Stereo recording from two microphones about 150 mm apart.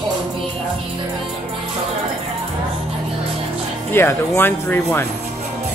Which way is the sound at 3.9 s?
15° left (ahead or behind).